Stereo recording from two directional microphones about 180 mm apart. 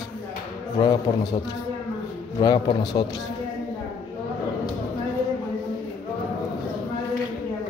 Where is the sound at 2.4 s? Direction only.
20° left (ahead or behind).